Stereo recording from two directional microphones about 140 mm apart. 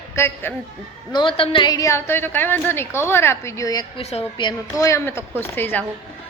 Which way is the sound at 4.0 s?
45° left (ahead or behind).